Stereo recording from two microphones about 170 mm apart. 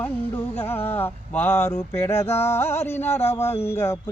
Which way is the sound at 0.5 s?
10° left (ahead or behind).